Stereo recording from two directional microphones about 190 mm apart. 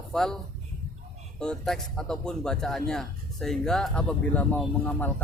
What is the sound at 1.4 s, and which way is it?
A man's voice, 5° left (ahead or behind).